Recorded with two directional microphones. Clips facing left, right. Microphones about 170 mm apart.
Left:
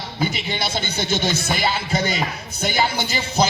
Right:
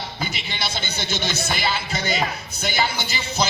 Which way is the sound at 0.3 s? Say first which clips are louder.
Left 5 dB; 45° left (ahead or behind).